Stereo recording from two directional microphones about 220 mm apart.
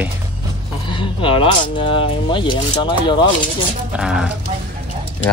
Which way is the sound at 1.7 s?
25° left (ahead or behind).